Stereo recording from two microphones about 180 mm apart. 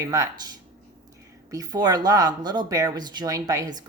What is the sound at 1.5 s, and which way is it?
Speech, 20° right (ahead or behind).